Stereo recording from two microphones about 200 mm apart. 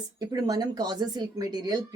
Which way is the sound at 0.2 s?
20° right (ahead or behind).